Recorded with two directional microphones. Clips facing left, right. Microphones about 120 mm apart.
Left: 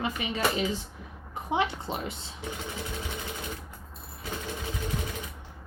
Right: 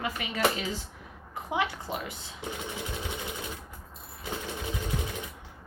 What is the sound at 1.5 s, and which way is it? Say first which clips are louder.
Speech: left 2 dB; 25° left (ahead or behind).